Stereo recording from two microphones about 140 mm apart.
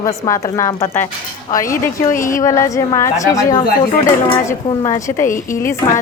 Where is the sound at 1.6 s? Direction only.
75° left (ahead or behind).